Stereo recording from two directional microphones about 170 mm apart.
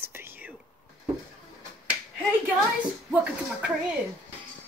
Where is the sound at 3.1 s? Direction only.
10° right (ahead or behind).